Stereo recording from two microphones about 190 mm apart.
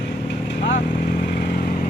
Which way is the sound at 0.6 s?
50° left (ahead or behind).